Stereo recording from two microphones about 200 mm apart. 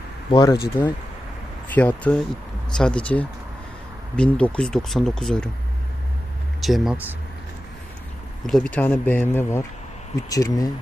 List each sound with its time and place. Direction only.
0.3 s speech: 25° left (ahead or behind)
1.7 s speech: 10° left (ahead or behind)
6.6 s speech: centre (ahead or behind)
8.4 s speech: 5° left (ahead or behind)